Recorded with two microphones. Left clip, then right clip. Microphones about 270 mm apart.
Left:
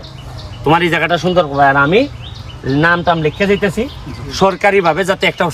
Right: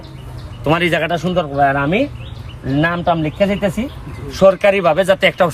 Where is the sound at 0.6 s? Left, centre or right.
Centre.